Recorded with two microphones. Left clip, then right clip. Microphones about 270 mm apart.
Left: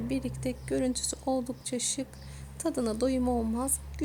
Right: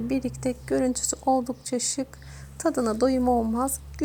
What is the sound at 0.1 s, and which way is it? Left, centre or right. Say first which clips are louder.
Speech: right 6 dB; right.